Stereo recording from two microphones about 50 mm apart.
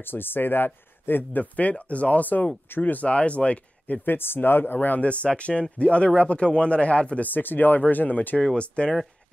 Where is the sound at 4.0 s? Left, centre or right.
Left.